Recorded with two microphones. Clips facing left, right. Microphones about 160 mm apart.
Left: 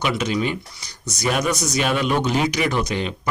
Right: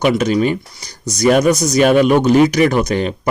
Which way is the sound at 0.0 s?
45° right (ahead or behind).